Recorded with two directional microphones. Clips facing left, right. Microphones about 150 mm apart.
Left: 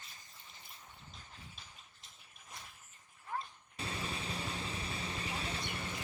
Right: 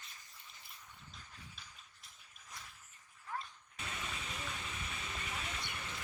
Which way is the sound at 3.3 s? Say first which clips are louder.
Left 3 dB; 30° left (ahead or behind).